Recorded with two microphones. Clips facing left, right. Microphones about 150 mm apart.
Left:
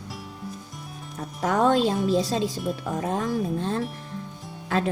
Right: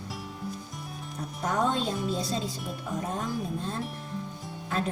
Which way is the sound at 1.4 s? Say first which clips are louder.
Left 7 dB; 90° left.